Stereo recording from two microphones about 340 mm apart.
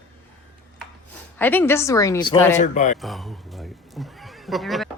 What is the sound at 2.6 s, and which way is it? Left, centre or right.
Speech, left.